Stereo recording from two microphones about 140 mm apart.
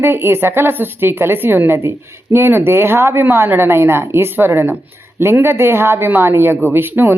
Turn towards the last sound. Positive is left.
turn(degrees=-15)  # may be behind; listen again after turning